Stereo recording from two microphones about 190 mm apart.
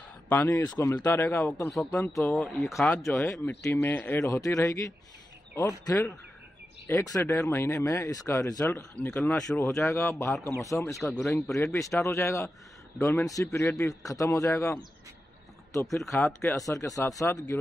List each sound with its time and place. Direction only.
0.3 s speech: 15° left (ahead or behind)
3.3 s speech: 15° left (ahead or behind)
6.9 s speech: 15° left (ahead or behind)
9.8 s speech: 15° left (ahead or behind)
11.1 s speech: 5° left (ahead or behind)
11.5 s speech: 15° left (ahead or behind)
16.0 s speech: centre (ahead or behind)
16.6 s speech: 20° left (ahead or behind)